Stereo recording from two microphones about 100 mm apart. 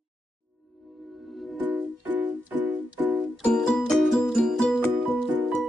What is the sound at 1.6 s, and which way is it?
Music, 15° right (ahead or behind).